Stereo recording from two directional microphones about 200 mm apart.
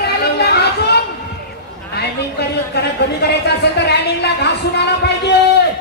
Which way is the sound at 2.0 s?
55° left (ahead or behind).